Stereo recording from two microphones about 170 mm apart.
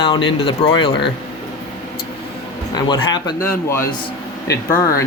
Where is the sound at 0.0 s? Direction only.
30° left (ahead or behind).